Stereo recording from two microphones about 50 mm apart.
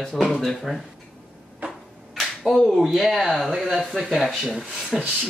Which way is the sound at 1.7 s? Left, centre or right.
Centre.